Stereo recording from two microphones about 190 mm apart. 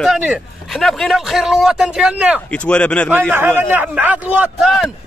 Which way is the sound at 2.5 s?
5° left (ahead or behind).